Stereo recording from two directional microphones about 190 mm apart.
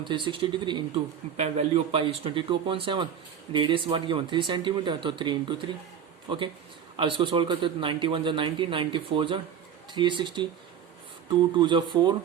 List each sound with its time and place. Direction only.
0.0 s a man's voice: 25° right (ahead or behind)